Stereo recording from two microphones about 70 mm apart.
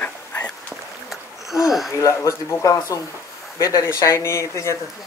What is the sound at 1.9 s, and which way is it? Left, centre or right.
Speech, left.